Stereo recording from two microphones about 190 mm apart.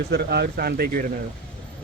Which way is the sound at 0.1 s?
60° right (ahead or behind).